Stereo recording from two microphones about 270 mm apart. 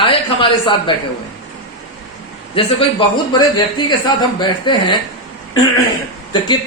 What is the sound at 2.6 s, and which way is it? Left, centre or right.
Speech, centre.